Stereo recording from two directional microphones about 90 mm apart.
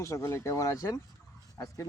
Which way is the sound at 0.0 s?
30° left (ahead or behind).